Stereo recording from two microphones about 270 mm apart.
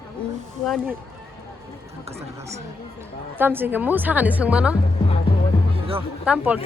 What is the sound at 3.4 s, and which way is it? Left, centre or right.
A woman's voice, centre.